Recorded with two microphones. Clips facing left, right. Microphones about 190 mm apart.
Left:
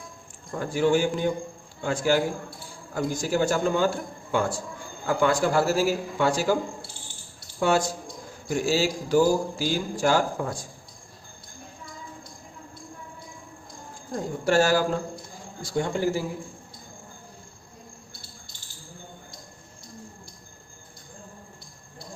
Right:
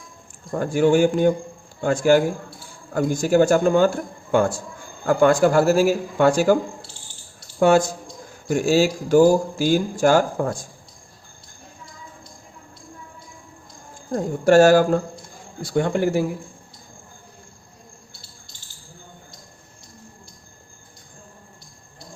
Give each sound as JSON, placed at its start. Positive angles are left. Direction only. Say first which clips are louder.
{"t": 0.5, "sound": "speech", "louder": "right 5 dB", "side_deg": -50}
{"t": 7.6, "sound": "speech", "louder": "right 7 dB", "side_deg": -50}
{"t": 14.1, "sound": "speech", "louder": "right 8 dB", "side_deg": -50}
{"t": 15.6, "sound": "a man's voice", "louder": "right 5 dB", "side_deg": -65}